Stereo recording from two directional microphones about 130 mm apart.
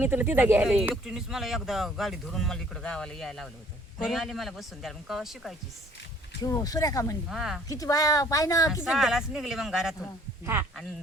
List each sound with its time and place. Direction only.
0.0 s speech: 15° right (ahead or behind)
0.6 s speech: 5° right (ahead or behind)
6.4 s speech: 25° left (ahead or behind)
7.3 s speech: centre (ahead or behind)
7.7 s speech: 25° left (ahead or behind)
8.8 s speech: 5° right (ahead or behind)
10.4 s speech: 20° right (ahead or behind)